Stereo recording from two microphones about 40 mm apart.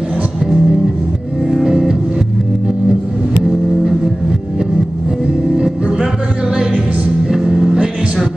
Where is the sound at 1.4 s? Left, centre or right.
Centre.